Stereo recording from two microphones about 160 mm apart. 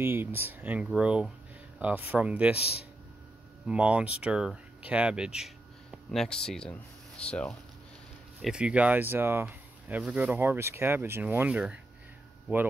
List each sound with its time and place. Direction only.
0.0 s speech: 15° right (ahead or behind)
2.5 s speech: 40° left (ahead or behind)
3.6 s speech: 10° right (ahead or behind)
8.4 s speech: 5° right (ahead or behind)